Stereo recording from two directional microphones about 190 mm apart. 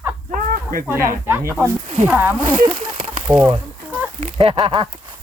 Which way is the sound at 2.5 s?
25° right (ahead or behind).